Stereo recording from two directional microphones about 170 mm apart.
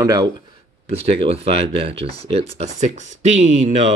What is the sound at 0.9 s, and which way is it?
Speech, 35° right (ahead or behind).